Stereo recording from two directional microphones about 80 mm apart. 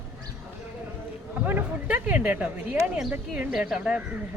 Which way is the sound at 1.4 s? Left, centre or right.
Right.